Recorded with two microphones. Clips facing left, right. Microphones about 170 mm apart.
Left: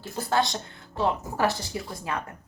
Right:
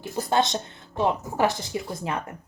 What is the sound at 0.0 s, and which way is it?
A woman's voice, 20° right (ahead or behind).